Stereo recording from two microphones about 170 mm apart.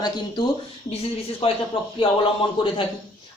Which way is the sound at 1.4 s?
35° left (ahead or behind).